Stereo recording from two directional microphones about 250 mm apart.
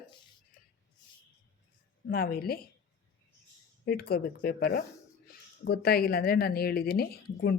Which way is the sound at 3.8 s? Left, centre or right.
Left.